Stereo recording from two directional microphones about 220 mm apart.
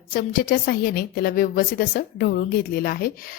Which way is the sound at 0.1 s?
40° left (ahead or behind).